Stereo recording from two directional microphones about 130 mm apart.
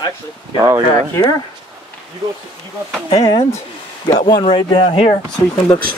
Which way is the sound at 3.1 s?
25° left (ahead or behind).